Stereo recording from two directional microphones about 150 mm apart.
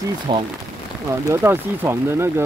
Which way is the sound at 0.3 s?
30° right (ahead or behind).